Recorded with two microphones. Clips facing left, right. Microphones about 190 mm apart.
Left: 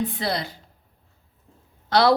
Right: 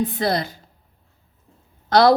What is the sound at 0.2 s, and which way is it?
Speech, 45° right (ahead or behind).